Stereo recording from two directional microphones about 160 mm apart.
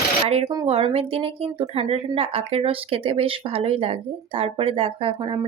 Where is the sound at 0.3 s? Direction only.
40° right (ahead or behind).